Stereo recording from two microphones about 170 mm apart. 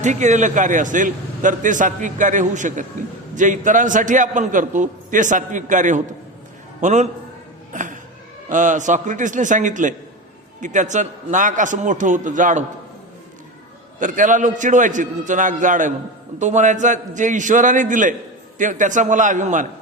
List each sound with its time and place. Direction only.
0.0 s a man's voice: 45° right (ahead or behind)
7.7 s a sound: 50° right (ahead or behind)
8.4 s a man's voice: 50° right (ahead or behind)
14.0 s a man's voice: 50° right (ahead or behind)